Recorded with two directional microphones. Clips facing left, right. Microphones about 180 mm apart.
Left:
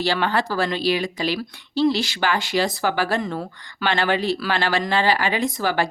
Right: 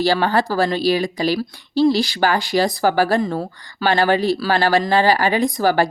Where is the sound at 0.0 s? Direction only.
35° right (ahead or behind).